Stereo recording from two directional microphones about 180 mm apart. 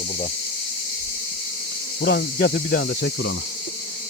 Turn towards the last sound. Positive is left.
turn(degrees=65)  # may be behind; listen again after turning